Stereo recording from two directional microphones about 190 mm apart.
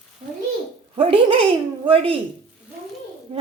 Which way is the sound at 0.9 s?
30° right (ahead or behind).